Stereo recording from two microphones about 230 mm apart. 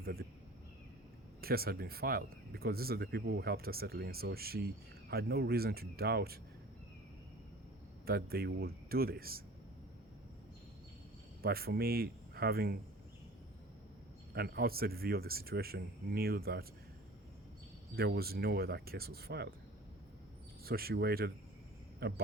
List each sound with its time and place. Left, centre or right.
0.0 s speech: right
1.4 s speech: right
8.0 s speech: right
11.4 s speech: right
14.3 s speech: right
17.9 s speech: right
20.7 s speech: right